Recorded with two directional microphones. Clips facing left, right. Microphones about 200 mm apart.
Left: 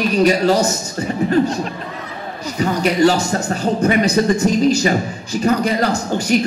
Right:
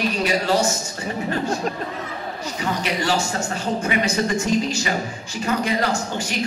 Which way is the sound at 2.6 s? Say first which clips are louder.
Left 11 dB; 40° left (ahead or behind).